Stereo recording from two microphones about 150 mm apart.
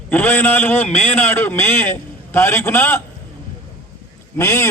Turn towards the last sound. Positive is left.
turn(degrees=20)  # may be behind; listen again after turning